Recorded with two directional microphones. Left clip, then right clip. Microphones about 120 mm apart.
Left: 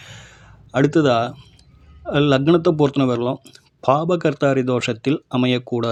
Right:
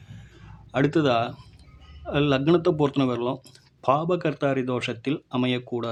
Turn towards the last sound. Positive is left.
turn(degrees=45)  # may be behind; listen again after turning